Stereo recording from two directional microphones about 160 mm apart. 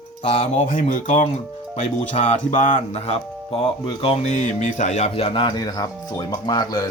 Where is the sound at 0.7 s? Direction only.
55° left (ahead or behind).